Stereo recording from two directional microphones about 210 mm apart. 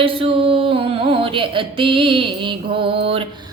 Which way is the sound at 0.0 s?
25° right (ahead or behind).